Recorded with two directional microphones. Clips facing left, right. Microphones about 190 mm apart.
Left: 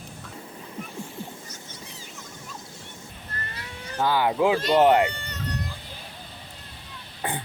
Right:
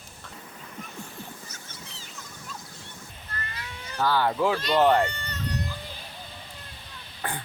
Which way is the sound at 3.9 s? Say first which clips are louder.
Left 2 dB; 15° left (ahead or behind).